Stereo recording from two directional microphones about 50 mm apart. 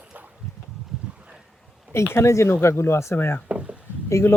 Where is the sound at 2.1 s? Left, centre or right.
Left.